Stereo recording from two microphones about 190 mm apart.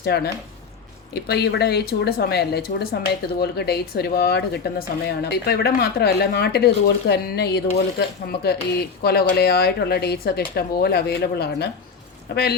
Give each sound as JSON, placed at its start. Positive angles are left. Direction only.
{"t": 0.0, "sound": "speech", "side_deg": 55}